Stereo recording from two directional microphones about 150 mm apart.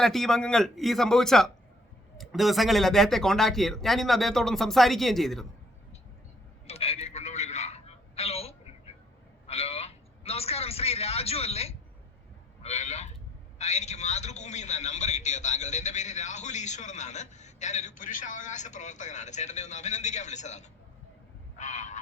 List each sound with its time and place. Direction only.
0.0 s speech: centre (ahead or behind)
6.7 s a sound: 40° left (ahead or behind)
9.5 s a man's voice: 45° left (ahead or behind)
21.6 s goose: 50° left (ahead or behind)